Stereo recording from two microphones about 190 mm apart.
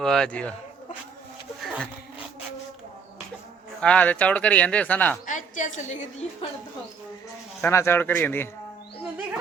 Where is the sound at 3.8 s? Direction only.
5° left (ahead or behind).